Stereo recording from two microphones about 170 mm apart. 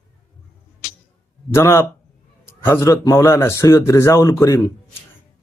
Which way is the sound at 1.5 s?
20° left (ahead or behind).